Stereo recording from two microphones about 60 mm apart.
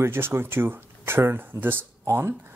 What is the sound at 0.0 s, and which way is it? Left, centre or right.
Speech, right.